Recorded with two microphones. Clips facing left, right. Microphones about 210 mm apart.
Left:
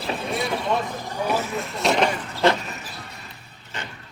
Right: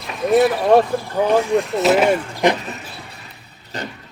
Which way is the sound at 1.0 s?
15° left (ahead or behind).